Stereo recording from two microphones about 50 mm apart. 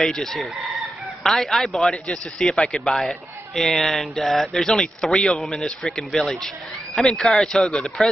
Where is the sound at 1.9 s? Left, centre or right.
Left.